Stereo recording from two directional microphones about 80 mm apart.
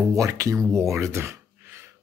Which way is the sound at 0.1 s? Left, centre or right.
Right.